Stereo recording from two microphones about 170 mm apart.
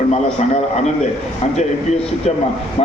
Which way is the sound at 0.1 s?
40° left (ahead or behind).